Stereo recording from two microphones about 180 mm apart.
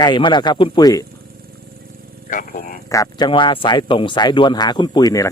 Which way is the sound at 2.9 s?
20° left (ahead or behind).